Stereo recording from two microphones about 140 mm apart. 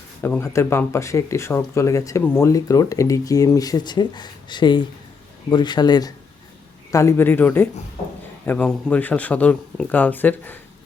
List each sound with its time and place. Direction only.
0.2 s speech: 15° left (ahead or behind)
6.9 s speech: 20° left (ahead or behind)